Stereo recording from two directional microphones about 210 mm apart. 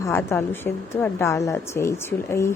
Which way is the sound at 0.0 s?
10° left (ahead or behind).